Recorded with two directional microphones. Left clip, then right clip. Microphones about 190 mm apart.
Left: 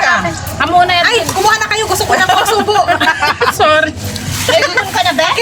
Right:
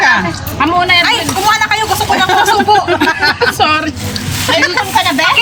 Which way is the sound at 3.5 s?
5° left (ahead or behind).